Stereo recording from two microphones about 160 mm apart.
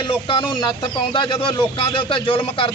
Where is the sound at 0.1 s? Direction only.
30° left (ahead or behind).